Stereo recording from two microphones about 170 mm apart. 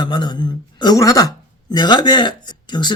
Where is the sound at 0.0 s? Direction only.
25° left (ahead or behind).